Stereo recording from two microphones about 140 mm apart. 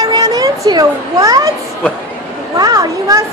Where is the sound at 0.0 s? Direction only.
25° right (ahead or behind).